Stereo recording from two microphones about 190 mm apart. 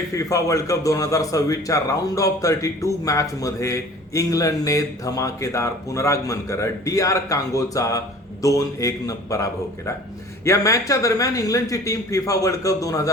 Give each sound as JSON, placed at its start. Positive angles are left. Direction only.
{"t": 0.1, "sound": "a man's voice", "side_deg": 15}